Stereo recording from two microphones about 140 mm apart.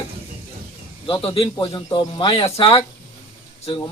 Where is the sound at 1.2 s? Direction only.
40° left (ahead or behind).